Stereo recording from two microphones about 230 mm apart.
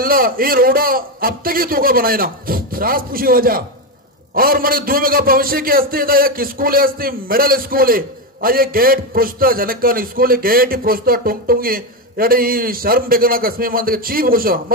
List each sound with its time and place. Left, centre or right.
0.0 s a man's voice: right